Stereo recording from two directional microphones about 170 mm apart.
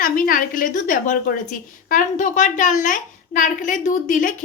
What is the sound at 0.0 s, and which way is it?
A woman's voice, 55° left (ahead or behind).